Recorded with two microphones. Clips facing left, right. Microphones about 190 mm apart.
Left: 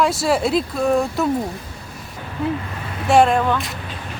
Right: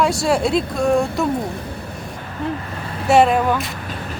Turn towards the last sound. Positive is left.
turn(degrees=-10)  # may be behind; listen again after turning